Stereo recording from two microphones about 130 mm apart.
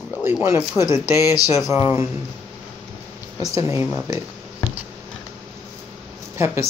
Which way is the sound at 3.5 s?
20° right (ahead or behind).